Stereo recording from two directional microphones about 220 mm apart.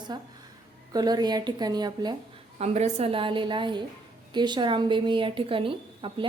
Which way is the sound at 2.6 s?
30° right (ahead or behind).